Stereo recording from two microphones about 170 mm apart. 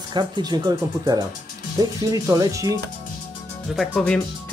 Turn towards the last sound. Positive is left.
turn(degrees=0)  # may be behind; listen again after turning